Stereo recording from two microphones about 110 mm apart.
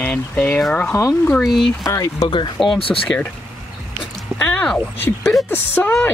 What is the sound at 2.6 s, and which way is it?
Speech, centre (ahead or behind).